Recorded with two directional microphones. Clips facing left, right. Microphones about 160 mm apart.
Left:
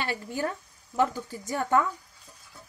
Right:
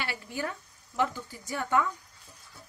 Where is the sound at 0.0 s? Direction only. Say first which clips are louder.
Left 4 dB; 40° left (ahead or behind).